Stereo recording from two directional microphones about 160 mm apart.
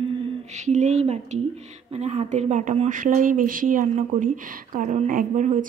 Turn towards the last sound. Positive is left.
turn(degrees=-50)  # may be behind; listen again after turning